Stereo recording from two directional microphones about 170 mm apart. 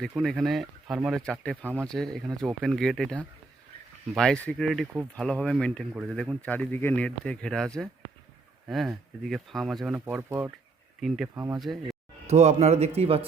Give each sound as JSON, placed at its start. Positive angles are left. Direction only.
{"t": 0.1, "sound": "speech", "side_deg": 0}
{"t": 11.6, "sound": "speech", "side_deg": 0}
{"t": 12.3, "sound": "speech", "side_deg": -40}